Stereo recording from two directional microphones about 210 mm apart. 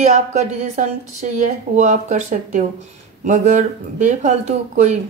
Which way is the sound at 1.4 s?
35° right (ahead or behind).